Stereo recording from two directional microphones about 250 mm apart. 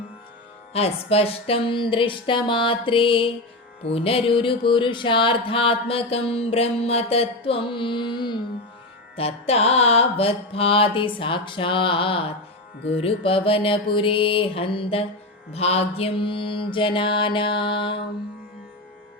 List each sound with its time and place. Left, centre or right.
0.7 s music: left